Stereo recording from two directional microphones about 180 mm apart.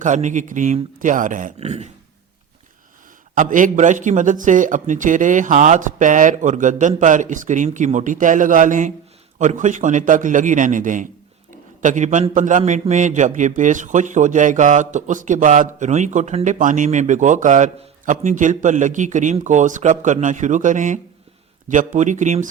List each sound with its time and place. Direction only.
0.0 s a man's voice: 40° right (ahead or behind)
3.3 s a man's voice: 45° right (ahead or behind)